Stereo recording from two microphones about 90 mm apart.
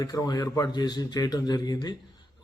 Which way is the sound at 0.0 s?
40° left (ahead or behind).